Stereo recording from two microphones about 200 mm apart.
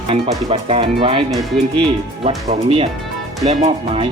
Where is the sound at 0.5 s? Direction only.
30° right (ahead or behind).